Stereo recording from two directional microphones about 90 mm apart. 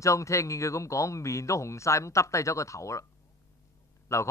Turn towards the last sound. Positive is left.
turn(degrees=35)  # may be behind; listen again after turning